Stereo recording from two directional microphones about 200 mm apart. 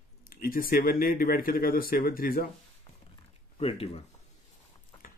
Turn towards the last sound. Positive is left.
turn(degrees=30)  # may be behind; listen again after turning